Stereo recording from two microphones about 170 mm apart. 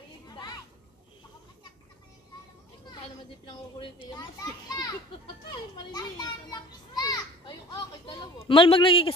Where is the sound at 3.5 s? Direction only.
30° left (ahead or behind).